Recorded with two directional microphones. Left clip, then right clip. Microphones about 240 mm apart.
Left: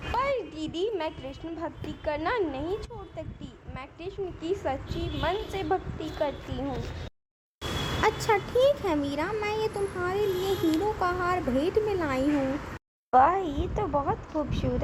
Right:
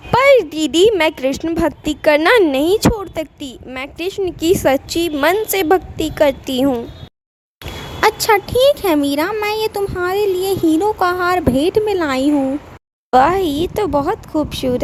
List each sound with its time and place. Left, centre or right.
0.1 s a woman's voice: right
8.0 s a woman's voice: right